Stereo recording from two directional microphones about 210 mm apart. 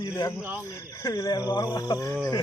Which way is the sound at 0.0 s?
20° left (ahead or behind).